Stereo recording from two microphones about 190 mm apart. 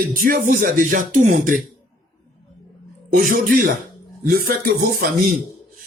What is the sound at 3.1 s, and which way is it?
Speech, 50° right (ahead or behind).